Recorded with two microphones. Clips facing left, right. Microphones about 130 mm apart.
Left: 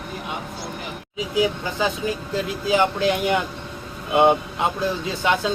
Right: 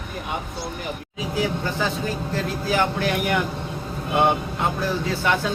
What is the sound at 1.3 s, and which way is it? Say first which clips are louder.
A man's voice: left 2 dB; 15° left (ahead or behind).